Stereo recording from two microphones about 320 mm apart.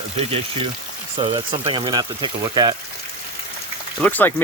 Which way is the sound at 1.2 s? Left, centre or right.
Centre.